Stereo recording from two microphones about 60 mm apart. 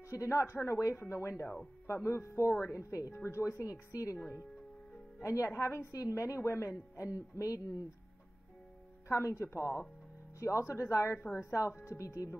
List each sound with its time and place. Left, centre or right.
0.0 s a woman's voice: left
2.5 s a woman's voice: left
2.8 s a woman's voice: left
3.9 s a woman's voice: left
5.2 s a woman's voice: left
7.0 s a woman's voice: left
9.1 s a woman's voice: left